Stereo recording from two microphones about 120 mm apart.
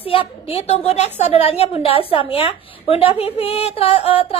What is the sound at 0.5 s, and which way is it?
A woman's voice, 60° left (ahead or behind).